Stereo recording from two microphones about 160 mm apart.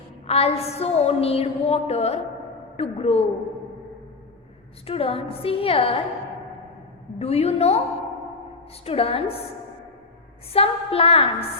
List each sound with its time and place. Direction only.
0.3 s a woman's voice: 40° left (ahead or behind)
4.9 s a woman's voice: 35° left (ahead or behind)
7.2 s a woman's voice: 40° left (ahead or behind)
8.8 s a woman's voice: 35° left (ahead or behind)
10.5 s a woman's voice: 35° left (ahead or behind)